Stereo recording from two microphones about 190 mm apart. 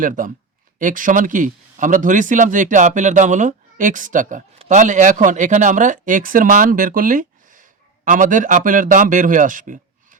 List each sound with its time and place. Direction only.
0.0 s speech: 45° right (ahead or behind)